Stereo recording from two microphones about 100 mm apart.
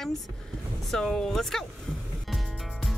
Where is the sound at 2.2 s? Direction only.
Centre (ahead or behind).